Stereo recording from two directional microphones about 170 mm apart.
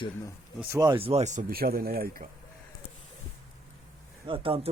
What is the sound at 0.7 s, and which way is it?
Speech, 25° right (ahead or behind).